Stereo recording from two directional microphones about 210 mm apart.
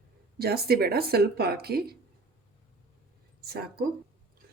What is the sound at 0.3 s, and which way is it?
Speech, 50° right (ahead or behind).